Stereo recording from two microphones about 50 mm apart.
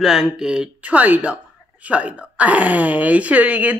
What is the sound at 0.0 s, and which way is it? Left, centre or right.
Speech, centre.